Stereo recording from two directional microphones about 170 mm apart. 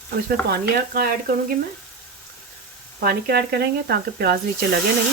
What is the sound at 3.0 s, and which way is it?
Speech, 65° right (ahead or behind).